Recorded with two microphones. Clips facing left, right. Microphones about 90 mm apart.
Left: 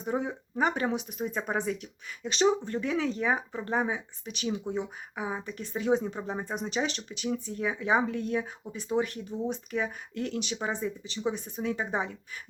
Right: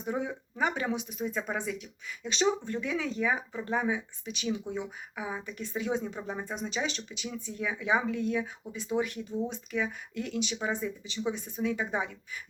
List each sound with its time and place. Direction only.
0.1 s speech: 30° left (ahead or behind)
6.1 s speech: 25° left (ahead or behind)
6.5 s speech: 45° left (ahead or behind)